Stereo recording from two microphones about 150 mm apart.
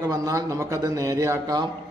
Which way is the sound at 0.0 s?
20° right (ahead or behind).